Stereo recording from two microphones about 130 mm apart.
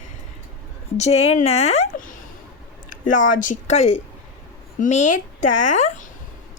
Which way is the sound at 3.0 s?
90° left.